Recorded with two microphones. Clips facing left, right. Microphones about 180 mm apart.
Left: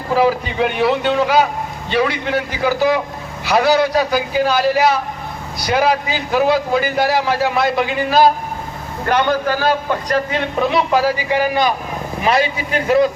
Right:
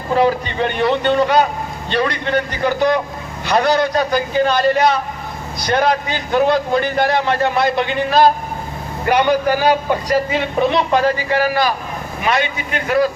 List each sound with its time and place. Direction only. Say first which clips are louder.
0.1 s a man's voice: even; 5° left (ahead or behind)
9.0 s a man's voice: right 2 dB; 10° right (ahead or behind); by 11.7 s 20° left (ahead or behind)
12.2 s speech: left 2 dB; 30° left (ahead or behind)